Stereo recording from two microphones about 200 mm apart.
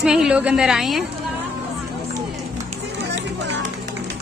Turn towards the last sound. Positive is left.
turn(degrees=-60)  # may be behind; listen again after turning